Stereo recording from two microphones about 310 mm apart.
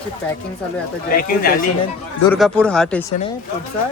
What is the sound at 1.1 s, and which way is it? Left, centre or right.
Speech, left.